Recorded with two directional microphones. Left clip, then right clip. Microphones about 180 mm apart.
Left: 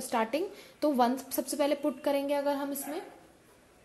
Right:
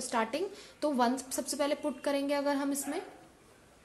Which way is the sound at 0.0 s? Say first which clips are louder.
Left 2 dB; 25° left (ahead or behind).